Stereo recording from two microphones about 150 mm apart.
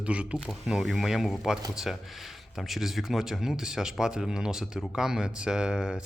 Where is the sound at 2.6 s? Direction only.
Centre (ahead or behind).